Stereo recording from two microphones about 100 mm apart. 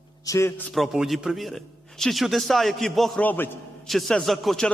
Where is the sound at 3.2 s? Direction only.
20° left (ahead or behind).